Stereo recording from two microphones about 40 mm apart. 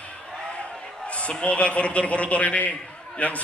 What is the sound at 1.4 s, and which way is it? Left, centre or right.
A man's voice, left.